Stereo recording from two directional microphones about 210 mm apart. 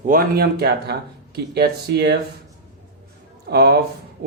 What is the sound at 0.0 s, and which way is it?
Speech, 40° right (ahead or behind).